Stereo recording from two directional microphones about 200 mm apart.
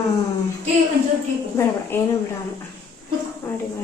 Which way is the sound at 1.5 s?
10° left (ahead or behind).